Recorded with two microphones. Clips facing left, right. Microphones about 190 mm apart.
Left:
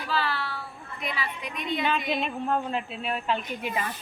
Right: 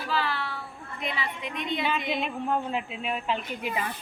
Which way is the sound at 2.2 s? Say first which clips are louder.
Left 1 dB; 10° right (ahead or behind).